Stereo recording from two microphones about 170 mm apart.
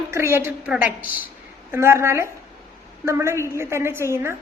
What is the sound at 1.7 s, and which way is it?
Speech, 15° right (ahead or behind).